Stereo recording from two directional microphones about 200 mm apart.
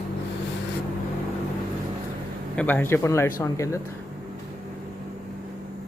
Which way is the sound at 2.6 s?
10° left (ahead or behind).